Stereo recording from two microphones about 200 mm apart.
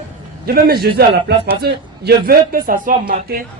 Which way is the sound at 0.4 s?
50° right (ahead or behind).